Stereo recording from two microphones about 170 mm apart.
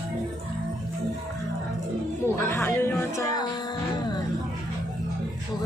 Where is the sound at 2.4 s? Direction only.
15° left (ahead or behind).